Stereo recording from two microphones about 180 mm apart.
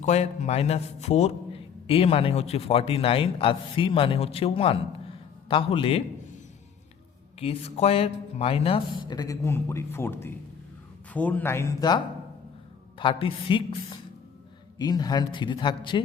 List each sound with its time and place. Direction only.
0.0 s a man's voice: 40° left (ahead or behind)
7.3 s speech: 35° left (ahead or behind)
13.0 s speech: 30° left (ahead or behind)